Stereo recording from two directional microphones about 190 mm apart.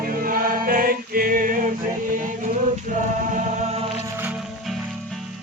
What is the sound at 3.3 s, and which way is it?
Chant, 35° right (ahead or behind).